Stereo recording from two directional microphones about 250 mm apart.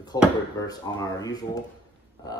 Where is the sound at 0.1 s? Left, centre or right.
Centre.